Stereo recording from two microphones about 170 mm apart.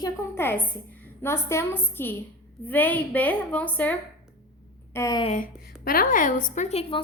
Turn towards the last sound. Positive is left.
turn(degrees=40)  # may be behind; listen again after turning